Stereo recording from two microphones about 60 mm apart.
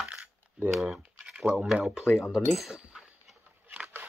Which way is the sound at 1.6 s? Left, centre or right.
Centre.